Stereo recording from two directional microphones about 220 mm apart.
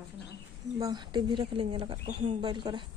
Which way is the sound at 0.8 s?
20° right (ahead or behind).